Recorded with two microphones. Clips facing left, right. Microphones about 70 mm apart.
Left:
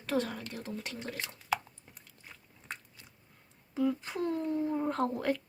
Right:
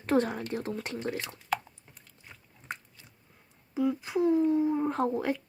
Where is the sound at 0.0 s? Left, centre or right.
Right.